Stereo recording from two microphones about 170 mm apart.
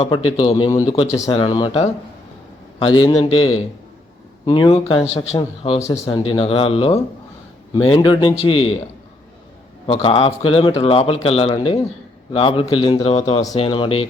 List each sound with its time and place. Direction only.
0.0 s a man's voice: 30° left (ahead or behind)
9.8 s a man's voice: 35° left (ahead or behind)